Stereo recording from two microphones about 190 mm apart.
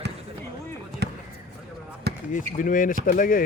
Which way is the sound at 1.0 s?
60° right (ahead or behind).